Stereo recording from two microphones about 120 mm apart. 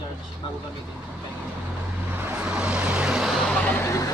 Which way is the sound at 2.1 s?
15° right (ahead or behind).